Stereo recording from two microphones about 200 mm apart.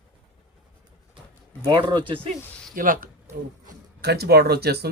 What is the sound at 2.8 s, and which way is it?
Speech, 45° right (ahead or behind).